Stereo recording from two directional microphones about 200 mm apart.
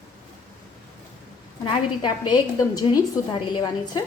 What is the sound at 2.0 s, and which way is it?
A woman's voice, 20° left (ahead or behind).